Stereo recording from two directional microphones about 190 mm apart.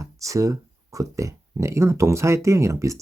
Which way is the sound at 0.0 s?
15° right (ahead or behind).